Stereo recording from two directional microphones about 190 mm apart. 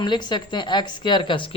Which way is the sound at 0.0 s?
25° left (ahead or behind).